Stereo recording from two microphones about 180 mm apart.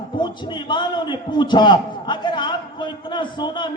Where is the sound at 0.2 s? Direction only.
25° left (ahead or behind).